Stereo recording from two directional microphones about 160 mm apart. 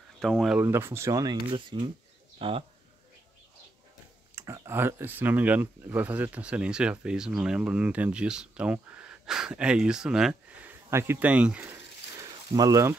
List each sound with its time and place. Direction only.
0.2 s speech: centre (ahead or behind)
0.6 s speech: 15° right (ahead or behind); by 2.6 s 35° right (ahead or behind)
4.4 s speech: 15° right (ahead or behind)
10.9 s snake: 15° right (ahead or behind)